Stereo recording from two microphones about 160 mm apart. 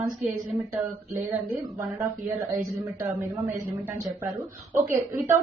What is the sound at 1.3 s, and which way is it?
Speech, 15° right (ahead or behind).